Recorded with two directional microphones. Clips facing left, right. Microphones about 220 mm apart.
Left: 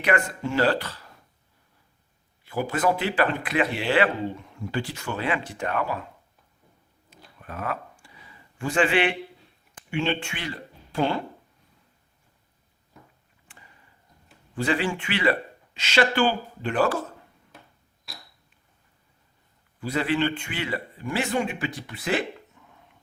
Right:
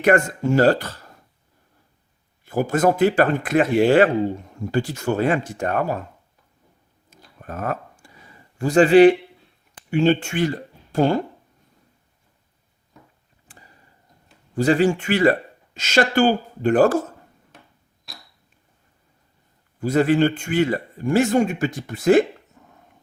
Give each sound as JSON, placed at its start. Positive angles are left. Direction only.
{"t": 0.0, "sound": "speech", "side_deg": -45}
{"t": 2.4, "sound": "speech", "side_deg": -45}
{"t": 7.3, "sound": "a sound", "side_deg": -45}
{"t": 9.9, "sound": "speech", "side_deg": -40}
{"t": 13.5, "sound": "a sound", "side_deg": -40}
{"t": 14.5, "sound": "speech", "side_deg": -40}
{"t": 19.8, "sound": "speech", "side_deg": -45}